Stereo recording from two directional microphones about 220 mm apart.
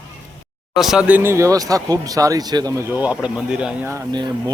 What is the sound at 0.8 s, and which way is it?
Speech, centre (ahead or behind).